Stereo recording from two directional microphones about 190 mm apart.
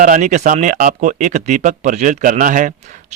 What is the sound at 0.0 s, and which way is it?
Speech, 40° right (ahead or behind).